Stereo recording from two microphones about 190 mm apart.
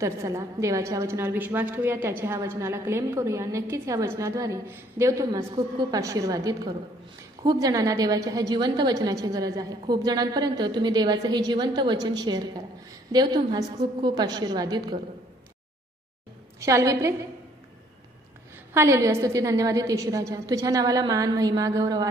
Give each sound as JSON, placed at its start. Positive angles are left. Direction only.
{"t": 0.0, "sound": "a woman's voice", "side_deg": -15}
{"t": 16.5, "sound": "a woman's voice", "side_deg": -15}
{"t": 18.7, "sound": "a woman's voice", "side_deg": -15}